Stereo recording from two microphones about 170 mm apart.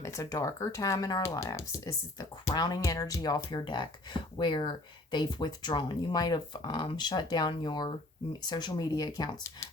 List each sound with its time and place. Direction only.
0.0 s speech: 20° left (ahead or behind)